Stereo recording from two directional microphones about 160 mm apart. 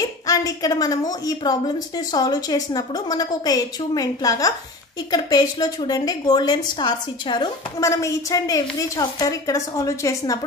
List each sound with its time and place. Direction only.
0.3 s a woman's voice: 20° left (ahead or behind)